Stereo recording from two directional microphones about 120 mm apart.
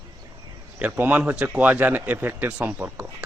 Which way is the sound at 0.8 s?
15° right (ahead or behind).